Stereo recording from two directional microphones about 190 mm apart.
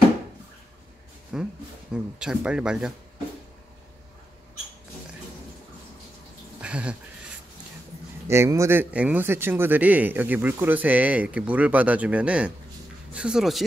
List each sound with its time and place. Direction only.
1.3 s speech: 5° right (ahead or behind)
6.6 s a sound: 5° right (ahead or behind)
8.3 s speech: 15° right (ahead or behind)